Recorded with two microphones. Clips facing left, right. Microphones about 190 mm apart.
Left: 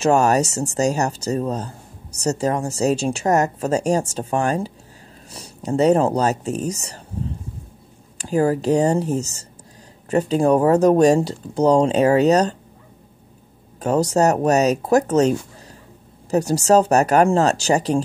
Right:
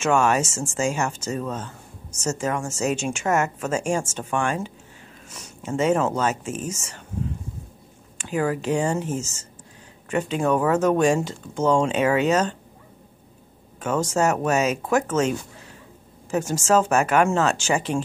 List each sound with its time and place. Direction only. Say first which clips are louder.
0.0 s speech: left 4 dB; 40° left (ahead or behind)
8.2 s speech: left 6 dB; 35° left (ahead or behind)
13.7 s speech: left 5 dB; 35° left (ahead or behind)